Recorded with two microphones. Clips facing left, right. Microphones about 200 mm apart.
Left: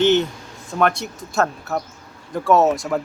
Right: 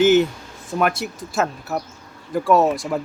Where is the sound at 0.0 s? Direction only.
5° right (ahead or behind).